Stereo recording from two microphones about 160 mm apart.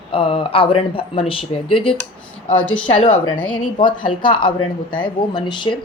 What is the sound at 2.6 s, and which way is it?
Speech, 10° left (ahead or behind).